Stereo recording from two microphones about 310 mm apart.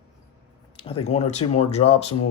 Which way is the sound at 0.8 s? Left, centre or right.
Centre.